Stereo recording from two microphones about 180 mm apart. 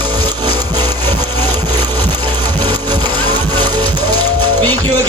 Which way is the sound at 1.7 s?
10° left (ahead or behind).